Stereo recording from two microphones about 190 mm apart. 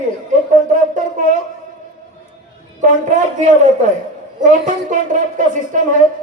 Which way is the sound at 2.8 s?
40° right (ahead or behind).